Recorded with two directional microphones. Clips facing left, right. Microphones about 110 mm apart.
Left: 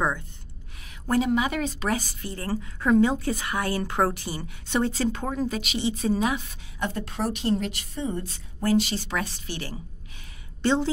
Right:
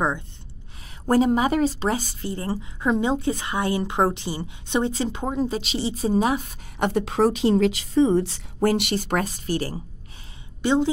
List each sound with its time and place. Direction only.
1.0 s speech: 35° right (ahead or behind)
6.8 s a woman's voice: 85° right
8.5 s speech: 65° right (ahead or behind); by 9.8 s 40° right (ahead or behind)
10.6 s a woman's voice: 15° right (ahead or behind)